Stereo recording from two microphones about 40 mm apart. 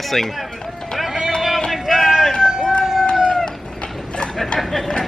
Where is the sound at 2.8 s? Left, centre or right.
Centre.